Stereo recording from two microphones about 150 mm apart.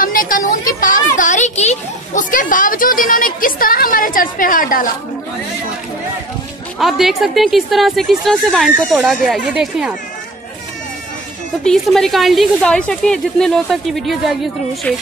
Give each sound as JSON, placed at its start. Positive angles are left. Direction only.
{"t": 0.0, "sound": "a child's voice", "side_deg": 65}
{"t": 6.8, "sound": "a woman's voice", "side_deg": 0}
{"t": 11.6, "sound": "a woman's voice", "side_deg": 0}